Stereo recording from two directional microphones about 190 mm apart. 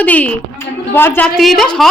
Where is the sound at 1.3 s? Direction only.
Centre (ahead or behind).